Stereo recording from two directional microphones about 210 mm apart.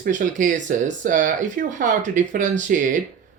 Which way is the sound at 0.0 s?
40° right (ahead or behind).